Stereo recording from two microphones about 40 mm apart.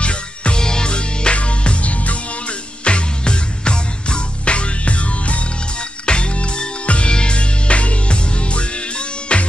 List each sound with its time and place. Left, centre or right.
0.0 s music: left